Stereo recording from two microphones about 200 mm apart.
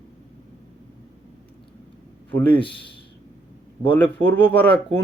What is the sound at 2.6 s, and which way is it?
Speech, 25° left (ahead or behind).